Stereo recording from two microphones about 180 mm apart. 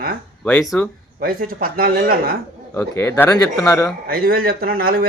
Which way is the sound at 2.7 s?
15° left (ahead or behind).